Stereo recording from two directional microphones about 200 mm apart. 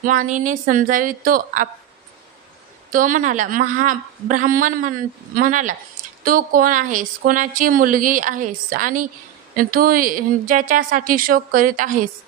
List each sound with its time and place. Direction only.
0.0 s a woman's voice: 40° right (ahead or behind)
2.9 s a woman's voice: 40° right (ahead or behind)